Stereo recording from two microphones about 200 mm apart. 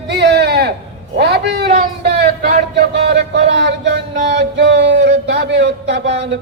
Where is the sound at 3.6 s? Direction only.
55° right (ahead or behind).